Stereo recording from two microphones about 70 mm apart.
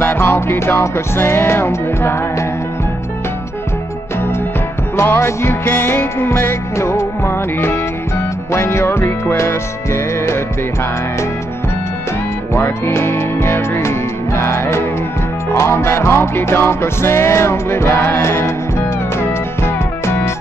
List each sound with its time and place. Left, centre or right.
0.0 s music: left
4.9 s music: left
12.5 s music: left